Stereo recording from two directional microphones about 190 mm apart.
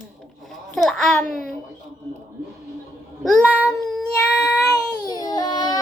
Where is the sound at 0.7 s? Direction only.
Centre (ahead or behind).